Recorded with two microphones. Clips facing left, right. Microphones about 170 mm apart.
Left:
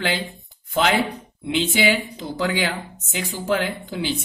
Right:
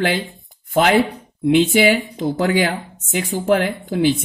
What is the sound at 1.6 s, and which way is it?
Speech, 50° right (ahead or behind).